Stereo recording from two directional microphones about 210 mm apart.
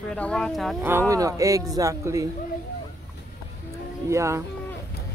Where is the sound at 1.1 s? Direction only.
15° right (ahead or behind).